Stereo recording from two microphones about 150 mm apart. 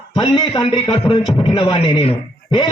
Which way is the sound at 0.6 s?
40° left (ahead or behind).